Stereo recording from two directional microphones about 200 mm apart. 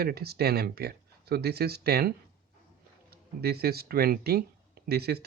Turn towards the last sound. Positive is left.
turn(degrees=-50)  # may be behind; listen again after turning